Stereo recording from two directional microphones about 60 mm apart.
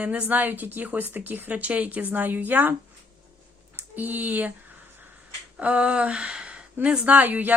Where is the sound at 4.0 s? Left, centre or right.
Right.